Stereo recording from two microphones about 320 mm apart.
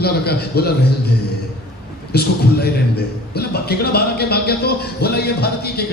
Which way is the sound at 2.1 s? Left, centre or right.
Left.